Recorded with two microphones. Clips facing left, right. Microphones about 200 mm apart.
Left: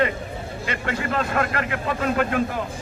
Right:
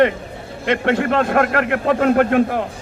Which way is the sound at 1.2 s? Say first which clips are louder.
Right 7 dB; 55° right (ahead or behind).